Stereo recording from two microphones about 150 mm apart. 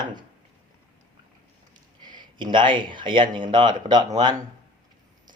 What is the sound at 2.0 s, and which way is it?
Speech, 30° right (ahead or behind).